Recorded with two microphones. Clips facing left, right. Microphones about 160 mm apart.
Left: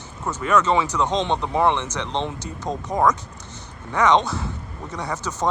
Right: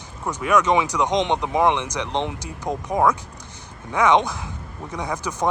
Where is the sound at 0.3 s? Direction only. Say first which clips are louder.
Right 1 dB; 15° right (ahead or behind).